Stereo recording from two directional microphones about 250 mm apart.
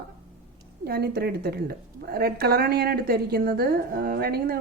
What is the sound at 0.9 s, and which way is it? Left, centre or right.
A woman's voice, right.